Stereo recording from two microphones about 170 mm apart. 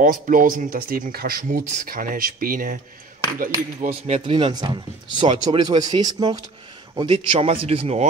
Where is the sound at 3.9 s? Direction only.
35° right (ahead or behind).